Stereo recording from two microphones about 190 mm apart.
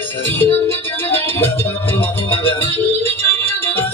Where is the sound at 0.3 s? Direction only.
10° left (ahead or behind).